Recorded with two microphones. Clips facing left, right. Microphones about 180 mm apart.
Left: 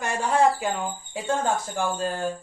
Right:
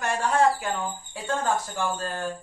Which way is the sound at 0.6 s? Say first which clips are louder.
Left 2 dB; 15° left (ahead or behind).